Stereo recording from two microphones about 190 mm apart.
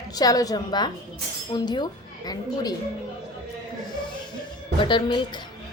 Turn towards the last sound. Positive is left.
turn(degrees=25)  # may be behind; listen again after turning